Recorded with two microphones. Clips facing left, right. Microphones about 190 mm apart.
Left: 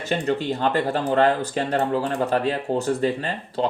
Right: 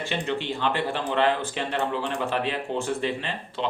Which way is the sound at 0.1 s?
40° left (ahead or behind).